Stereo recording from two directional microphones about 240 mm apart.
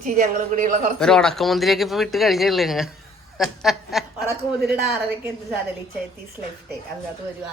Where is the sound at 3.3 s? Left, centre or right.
Centre.